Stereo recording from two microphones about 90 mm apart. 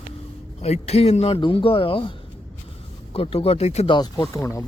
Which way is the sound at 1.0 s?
90° left.